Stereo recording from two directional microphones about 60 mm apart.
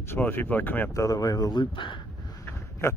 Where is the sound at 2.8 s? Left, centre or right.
Left.